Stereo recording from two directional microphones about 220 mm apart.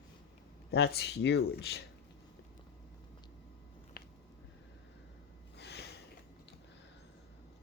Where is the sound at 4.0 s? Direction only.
45° left (ahead or behind).